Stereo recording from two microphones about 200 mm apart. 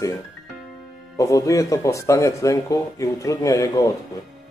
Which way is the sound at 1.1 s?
15° left (ahead or behind).